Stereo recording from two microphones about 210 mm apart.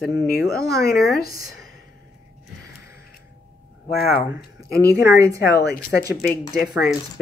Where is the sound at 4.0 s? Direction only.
45° left (ahead or behind).